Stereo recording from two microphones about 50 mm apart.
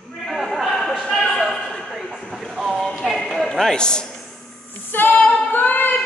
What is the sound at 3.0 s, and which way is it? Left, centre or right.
Clip-clop, centre.